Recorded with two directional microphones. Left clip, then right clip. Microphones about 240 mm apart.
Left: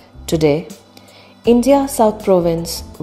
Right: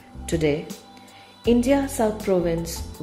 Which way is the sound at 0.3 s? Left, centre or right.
Left.